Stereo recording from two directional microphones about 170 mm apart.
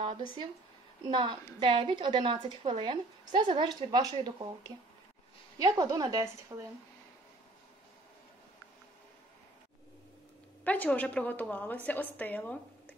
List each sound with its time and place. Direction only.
0.0 s a woman's voice: 30° right (ahead or behind)
10.6 s a woman's voice: 10° left (ahead or behind)